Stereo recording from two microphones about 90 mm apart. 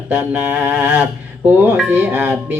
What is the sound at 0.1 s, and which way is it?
Speech, 20° right (ahead or behind).